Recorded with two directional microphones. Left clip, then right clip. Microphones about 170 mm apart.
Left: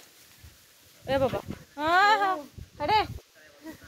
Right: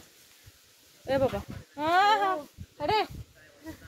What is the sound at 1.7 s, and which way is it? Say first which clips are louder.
Speech: left 1 dB; 10° left (ahead or behind).